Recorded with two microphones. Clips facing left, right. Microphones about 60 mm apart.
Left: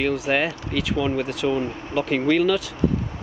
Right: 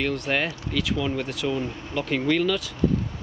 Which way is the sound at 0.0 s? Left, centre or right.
Centre.